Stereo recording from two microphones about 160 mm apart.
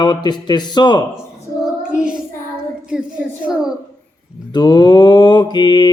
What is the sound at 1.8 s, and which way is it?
Child singing, 5° right (ahead or behind).